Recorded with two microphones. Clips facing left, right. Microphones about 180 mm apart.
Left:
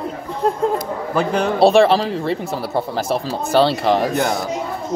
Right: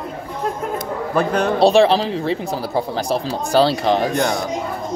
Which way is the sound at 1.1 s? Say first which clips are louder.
Right 1 dB; 10° left (ahead or behind).